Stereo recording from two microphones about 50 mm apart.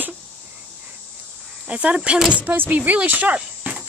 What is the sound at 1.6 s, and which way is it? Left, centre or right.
Speech, right.